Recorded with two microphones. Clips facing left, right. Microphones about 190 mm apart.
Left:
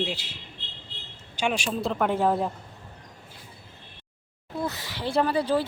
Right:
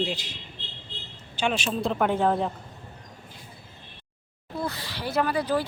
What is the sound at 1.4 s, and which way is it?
Speech, 10° left (ahead or behind).